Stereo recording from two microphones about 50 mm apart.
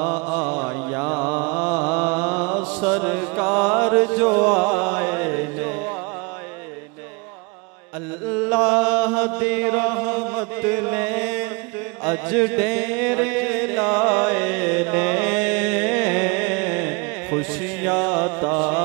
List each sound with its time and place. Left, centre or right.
0.0 s mantra: centre
8.5 s chant: centre
12.1 s speech: right
12.8 s music: right